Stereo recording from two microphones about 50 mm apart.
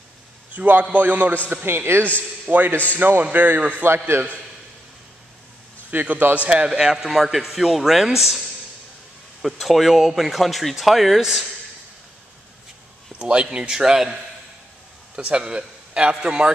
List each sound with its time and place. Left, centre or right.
0.5 s a man's voice: right
1.5 s a man's voice: right
2.5 s a man's voice: right
3.8 s a man's voice: right
5.9 s a man's voice: right; by 8.1 s centre
9.4 s a man's voice: centre
13.2 s a man's voice: right
15.1 s a man's voice: right